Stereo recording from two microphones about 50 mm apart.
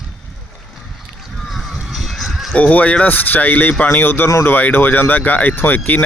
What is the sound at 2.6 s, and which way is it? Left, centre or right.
Speech, left.